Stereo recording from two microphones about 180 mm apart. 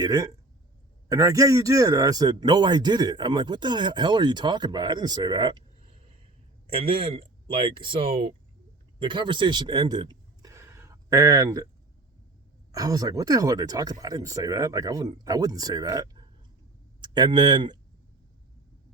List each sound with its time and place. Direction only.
0.0 s a man's voice: 20° right (ahead or behind)
12.7 s a man's voice: 20° right (ahead or behind)